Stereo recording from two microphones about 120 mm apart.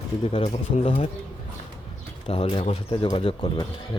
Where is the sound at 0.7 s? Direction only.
60° left (ahead or behind).